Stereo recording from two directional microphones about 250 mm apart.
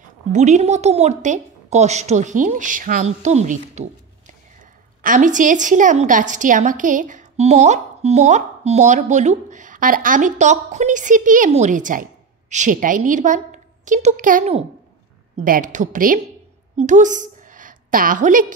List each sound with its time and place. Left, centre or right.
0.3 s a woman's voice: right
5.0 s a woman's voice: right